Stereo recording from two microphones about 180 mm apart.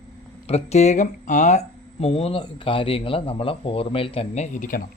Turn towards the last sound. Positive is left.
turn(degrees=45)  # may be behind; listen again after turning